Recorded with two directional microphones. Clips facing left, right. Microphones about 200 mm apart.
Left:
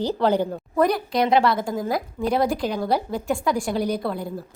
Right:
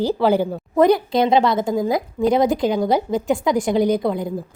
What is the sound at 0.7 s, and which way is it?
A woman's voice, 20° right (ahead or behind).